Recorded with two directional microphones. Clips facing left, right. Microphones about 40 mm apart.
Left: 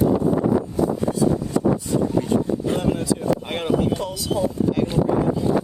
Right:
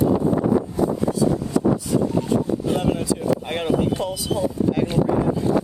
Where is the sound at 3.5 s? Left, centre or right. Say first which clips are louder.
Right 1 dB; centre.